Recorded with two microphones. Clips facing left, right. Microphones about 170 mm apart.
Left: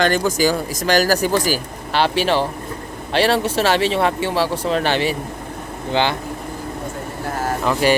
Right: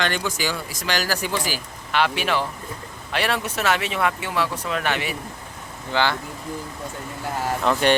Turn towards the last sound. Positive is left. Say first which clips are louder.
# left 2 dB
turn(degrees=5)  # may be behind; listen again after turning